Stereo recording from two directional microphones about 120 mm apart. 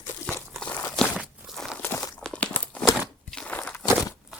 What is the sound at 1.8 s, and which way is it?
Crunch, 20° left (ahead or behind).